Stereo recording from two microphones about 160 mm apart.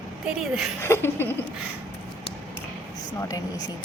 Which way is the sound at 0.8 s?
15° left (ahead or behind).